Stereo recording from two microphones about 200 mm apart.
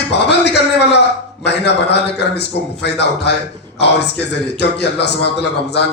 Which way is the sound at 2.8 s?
55° left (ahead or behind).